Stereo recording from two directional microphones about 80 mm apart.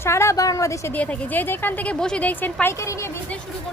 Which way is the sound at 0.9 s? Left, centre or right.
Centre.